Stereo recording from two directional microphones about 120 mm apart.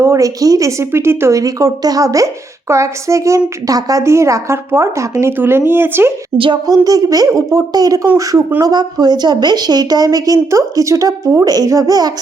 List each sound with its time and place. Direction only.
0.0 s speech: 25° right (ahead or behind)
6.3 s a sound: 45° right (ahead or behind)
6.7 s speech: 30° right (ahead or behind)